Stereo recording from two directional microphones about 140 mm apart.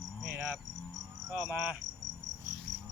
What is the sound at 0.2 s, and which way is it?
Cricket, 5° right (ahead or behind).